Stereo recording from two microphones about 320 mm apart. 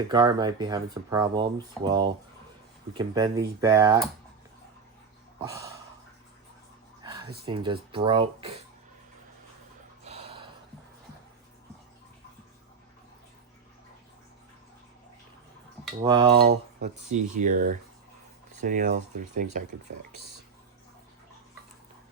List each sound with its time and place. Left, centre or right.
0.1 s speech: centre
5.4 s speech: centre
7.4 s speech: centre
10.0 s gasp: centre
16.0 s speech: centre
16.4 s cutlery: right